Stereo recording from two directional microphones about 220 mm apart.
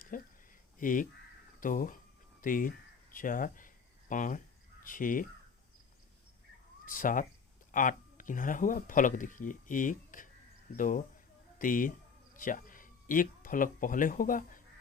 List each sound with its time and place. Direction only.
0.1 s speech: 40° left (ahead or behind)
6.8 s speech: 40° left (ahead or behind)